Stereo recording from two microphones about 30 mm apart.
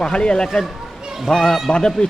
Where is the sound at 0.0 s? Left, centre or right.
Left.